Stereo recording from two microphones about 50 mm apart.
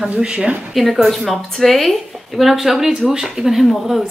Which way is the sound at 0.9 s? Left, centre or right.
Centre.